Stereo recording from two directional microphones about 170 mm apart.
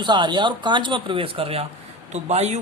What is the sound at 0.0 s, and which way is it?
Speech, 25° right (ahead or behind).